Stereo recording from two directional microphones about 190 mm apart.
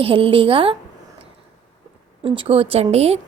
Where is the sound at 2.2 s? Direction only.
30° right (ahead or behind).